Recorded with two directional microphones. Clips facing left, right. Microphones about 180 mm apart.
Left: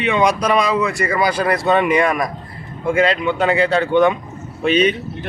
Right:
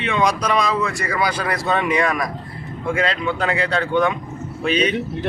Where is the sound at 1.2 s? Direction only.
50° left (ahead or behind).